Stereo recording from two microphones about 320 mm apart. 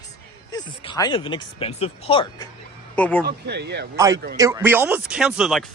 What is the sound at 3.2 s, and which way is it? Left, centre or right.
A man's voice, right.